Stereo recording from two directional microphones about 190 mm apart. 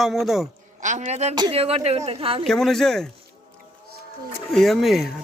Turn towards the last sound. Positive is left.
turn(degrees=0)  # may be behind; listen again after turning